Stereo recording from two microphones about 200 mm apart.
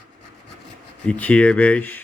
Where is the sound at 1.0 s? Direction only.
5° left (ahead or behind).